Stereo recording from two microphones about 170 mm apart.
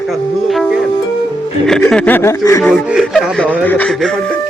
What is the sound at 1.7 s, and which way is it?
Speech, 5° left (ahead or behind).